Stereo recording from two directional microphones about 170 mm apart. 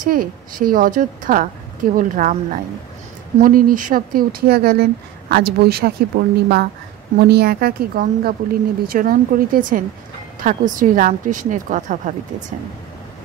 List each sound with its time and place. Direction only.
0.0 s a woman's voice: 55° right (ahead or behind)